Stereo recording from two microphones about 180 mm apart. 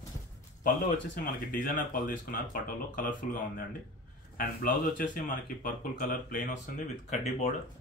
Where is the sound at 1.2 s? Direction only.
50° left (ahead or behind).